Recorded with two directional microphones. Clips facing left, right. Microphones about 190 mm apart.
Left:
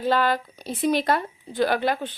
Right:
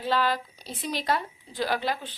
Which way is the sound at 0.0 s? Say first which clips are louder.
Left 4 dB; 50° left (ahead or behind).